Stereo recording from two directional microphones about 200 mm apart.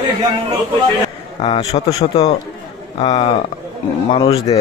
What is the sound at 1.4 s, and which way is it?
Speech, 30° left (ahead or behind).